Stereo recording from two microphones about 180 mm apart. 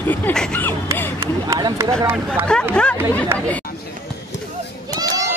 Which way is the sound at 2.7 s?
5° left (ahead or behind).